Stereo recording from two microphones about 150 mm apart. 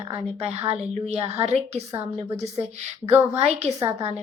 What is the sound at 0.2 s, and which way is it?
A woman's voice, 40° right (ahead or behind).